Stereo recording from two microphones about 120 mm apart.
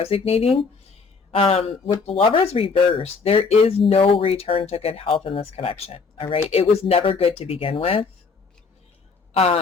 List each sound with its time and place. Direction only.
0.0 s speech: 55° left (ahead or behind)
9.3 s speech: 55° left (ahead or behind)